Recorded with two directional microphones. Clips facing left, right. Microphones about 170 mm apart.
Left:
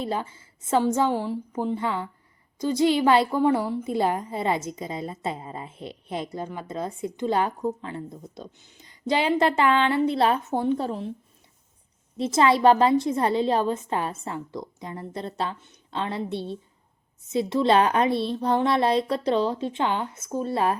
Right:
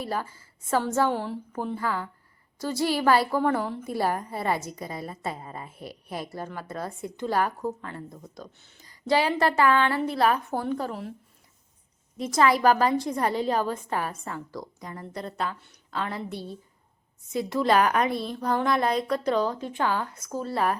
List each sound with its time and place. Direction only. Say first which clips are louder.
0.0 s a woman's voice: left 2 dB; 20° left (ahead or behind)
3.8 s a woman's voice: left 3 dB; 20° left (ahead or behind)
12.1 s a woman's voice: left 2 dB; 25° left (ahead or behind)